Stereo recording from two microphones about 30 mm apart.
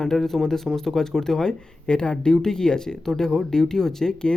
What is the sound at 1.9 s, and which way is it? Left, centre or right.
Speech, left.